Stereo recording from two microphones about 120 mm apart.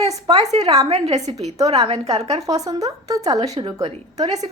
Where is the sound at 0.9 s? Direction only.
65° right (ahead or behind).